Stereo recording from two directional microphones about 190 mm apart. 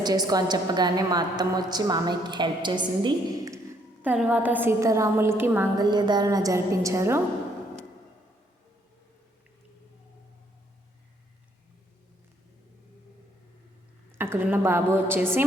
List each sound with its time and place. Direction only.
0.0 s a woman's voice: 20° right (ahead or behind)
4.0 s a woman's voice: 10° right (ahead or behind)
14.2 s a woman's voice: 10° right (ahead or behind)